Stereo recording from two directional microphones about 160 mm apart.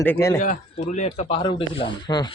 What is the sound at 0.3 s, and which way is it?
Speech, 55° left (ahead or behind).